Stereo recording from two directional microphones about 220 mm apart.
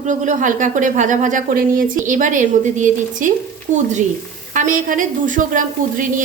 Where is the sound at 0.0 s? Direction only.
35° right (ahead or behind).